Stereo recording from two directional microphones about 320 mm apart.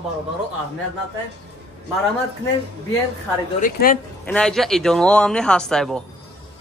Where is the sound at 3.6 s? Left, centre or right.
Left.